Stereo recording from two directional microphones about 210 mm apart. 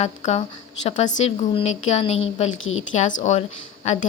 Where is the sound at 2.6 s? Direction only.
70° left (ahead or behind).